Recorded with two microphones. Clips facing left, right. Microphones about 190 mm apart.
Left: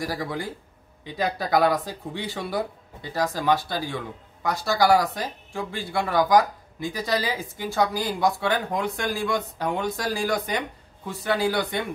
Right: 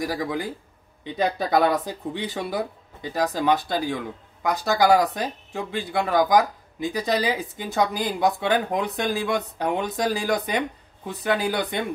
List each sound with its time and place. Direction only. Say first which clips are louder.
0.0 s speech: right 3 dB; 20° right (ahead or behind)